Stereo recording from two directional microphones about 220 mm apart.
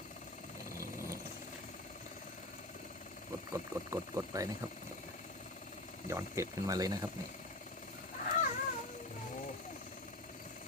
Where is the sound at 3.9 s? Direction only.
15° right (ahead or behind).